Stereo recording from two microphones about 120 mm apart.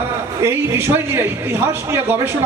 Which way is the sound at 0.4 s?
20° right (ahead or behind).